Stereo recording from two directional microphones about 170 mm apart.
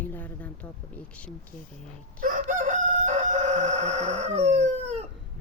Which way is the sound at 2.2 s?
55° right (ahead or behind).